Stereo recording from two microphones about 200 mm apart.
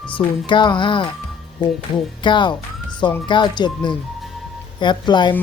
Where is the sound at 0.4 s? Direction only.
25° left (ahead or behind).